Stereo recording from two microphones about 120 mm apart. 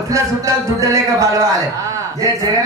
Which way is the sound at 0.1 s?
25° right (ahead or behind).